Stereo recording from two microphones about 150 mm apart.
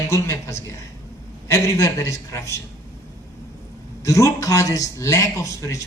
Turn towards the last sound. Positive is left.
turn(degrees=20)  # may be behind; listen again after turning